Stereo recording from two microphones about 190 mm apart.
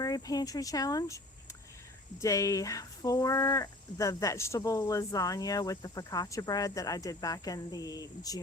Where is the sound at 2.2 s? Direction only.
15° left (ahead or behind).